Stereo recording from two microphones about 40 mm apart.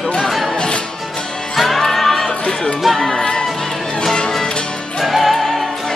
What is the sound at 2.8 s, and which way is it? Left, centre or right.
Music, centre.